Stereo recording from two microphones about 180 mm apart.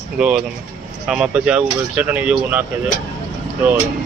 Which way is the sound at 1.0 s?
5° right (ahead or behind).